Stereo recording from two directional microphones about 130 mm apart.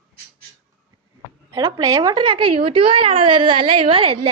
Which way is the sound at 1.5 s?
30° right (ahead or behind).